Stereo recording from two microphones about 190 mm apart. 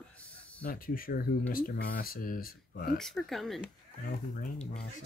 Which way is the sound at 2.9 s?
Centre (ahead or behind).